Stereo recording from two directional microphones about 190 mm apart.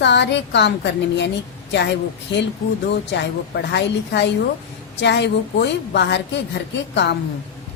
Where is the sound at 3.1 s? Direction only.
65° left (ahead or behind).